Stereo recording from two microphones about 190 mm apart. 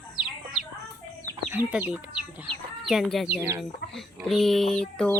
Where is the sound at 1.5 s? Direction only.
10° right (ahead or behind).